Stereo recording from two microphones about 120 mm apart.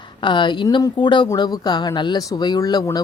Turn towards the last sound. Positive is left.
turn(degrees=35)  # may be behind; listen again after turning